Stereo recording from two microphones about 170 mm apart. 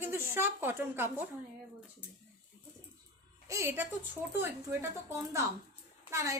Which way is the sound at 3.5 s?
15° right (ahead or behind).